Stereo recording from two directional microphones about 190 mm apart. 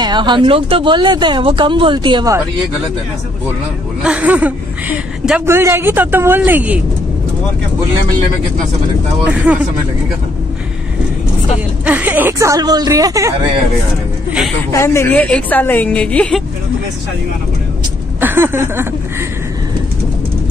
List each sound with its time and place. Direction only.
0.0 s speech: 25° right (ahead or behind)
4.0 s a woman's voice: 5° right (ahead or behind)
9.2 s a woman's voice: 5° right (ahead or behind)
11.8 s a woman's voice: 10° right (ahead or behind)
14.7 s a woman's voice: 15° left (ahead or behind)
18.2 s a woman's voice: 10° right (ahead or behind)